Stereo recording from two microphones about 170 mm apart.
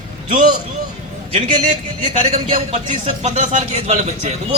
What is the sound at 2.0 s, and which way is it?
Speech, 40° right (ahead or behind).